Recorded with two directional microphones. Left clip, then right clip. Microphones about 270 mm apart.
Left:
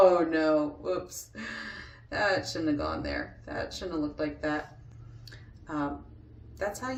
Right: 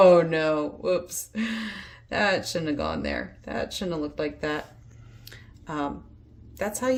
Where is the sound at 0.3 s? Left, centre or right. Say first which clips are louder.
Right 1 dB; right.